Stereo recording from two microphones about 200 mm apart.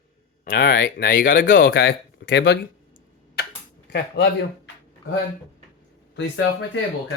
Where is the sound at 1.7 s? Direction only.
65° left (ahead or behind).